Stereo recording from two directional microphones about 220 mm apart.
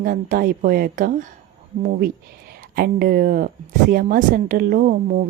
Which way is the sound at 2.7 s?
45° right (ahead or behind).